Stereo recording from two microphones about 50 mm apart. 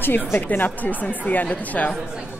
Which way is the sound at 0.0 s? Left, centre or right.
Left.